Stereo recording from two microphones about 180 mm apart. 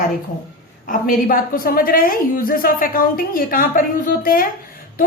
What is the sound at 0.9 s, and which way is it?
A woman's voice, 55° left (ahead or behind).